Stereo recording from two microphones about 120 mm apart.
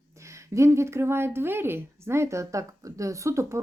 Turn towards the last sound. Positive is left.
turn(degrees=-25)  # may be behind; listen again after turning